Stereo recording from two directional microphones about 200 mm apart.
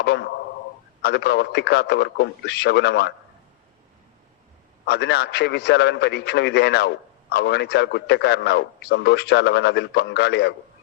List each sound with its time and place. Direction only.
0.0 s a man's voice: 60° left (ahead or behind)
4.9 s a man's voice: 55° left (ahead or behind)